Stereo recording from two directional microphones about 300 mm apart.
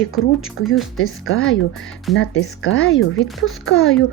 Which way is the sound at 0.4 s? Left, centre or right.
Left.